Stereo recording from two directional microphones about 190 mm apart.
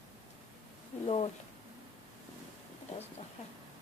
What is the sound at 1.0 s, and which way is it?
Speech, 30° left (ahead or behind).